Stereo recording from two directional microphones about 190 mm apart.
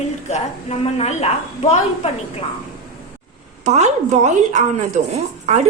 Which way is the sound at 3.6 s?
35° right (ahead or behind).